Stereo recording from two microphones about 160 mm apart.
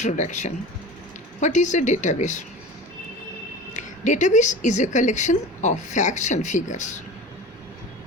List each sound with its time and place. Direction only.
0.0 s speech: 50° left (ahead or behind)
3.8 s speech: 50° left (ahead or behind)